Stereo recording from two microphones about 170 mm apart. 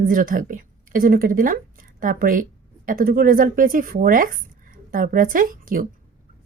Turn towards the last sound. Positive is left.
turn(degrees=-55)  # may be behind; listen again after turning